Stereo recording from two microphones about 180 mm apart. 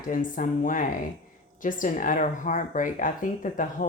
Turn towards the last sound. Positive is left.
turn(degrees=45)  # may be behind; listen again after turning